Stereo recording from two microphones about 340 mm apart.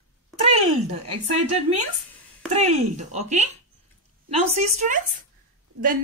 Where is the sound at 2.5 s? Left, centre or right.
Centre.